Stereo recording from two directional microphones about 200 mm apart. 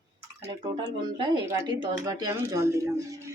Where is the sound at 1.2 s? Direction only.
20° right (ahead or behind).